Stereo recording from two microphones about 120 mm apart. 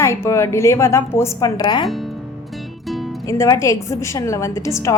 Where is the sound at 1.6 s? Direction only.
35° left (ahead or behind).